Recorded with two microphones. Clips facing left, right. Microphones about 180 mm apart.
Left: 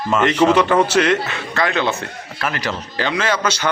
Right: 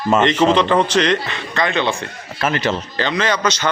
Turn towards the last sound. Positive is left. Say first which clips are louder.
# right 1 dB
turn(degrees=10)  # may be behind; listen again after turning